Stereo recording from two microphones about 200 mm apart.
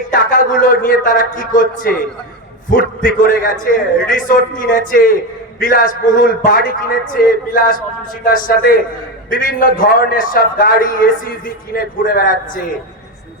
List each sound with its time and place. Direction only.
0.1 s a man's voice: 45° left (ahead or behind)
2.6 s a man's voice: 45° left (ahead or behind)